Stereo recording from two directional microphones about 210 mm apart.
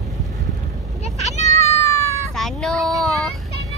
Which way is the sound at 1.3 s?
35° left (ahead or behind).